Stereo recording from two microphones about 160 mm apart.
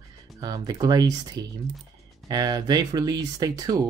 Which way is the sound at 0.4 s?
25° right (ahead or behind).